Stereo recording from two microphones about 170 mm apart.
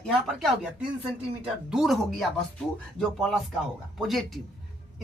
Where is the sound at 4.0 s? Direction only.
Centre (ahead or behind).